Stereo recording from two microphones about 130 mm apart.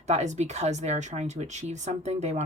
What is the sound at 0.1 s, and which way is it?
A woman's voice, 60° right (ahead or behind).